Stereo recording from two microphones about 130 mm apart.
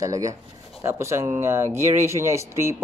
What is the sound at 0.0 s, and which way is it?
Speech, 25° right (ahead or behind).